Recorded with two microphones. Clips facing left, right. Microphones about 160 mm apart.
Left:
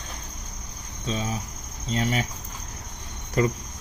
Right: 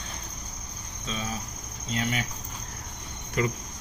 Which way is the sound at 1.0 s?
35° left (ahead or behind).